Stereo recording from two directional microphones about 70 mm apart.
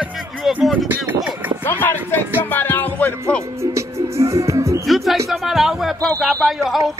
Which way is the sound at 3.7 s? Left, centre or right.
Right.